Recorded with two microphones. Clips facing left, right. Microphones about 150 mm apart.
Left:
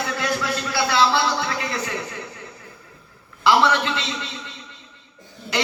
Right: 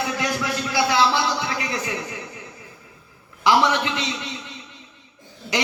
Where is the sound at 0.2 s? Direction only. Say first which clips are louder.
Even; 15° right (ahead or behind).